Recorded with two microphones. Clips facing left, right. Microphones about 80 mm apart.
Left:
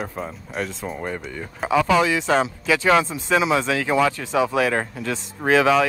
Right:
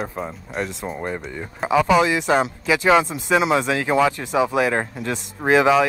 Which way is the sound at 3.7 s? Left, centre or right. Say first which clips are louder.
Right 1 dB; centre.